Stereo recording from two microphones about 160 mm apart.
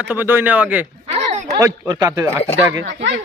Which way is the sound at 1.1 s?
45° right (ahead or behind).